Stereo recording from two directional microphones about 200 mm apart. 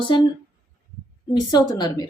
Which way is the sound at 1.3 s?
20° left (ahead or behind).